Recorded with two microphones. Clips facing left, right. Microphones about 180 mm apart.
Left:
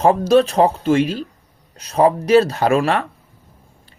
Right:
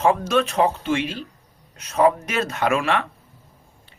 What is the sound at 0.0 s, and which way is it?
Speech, 35° left (ahead or behind).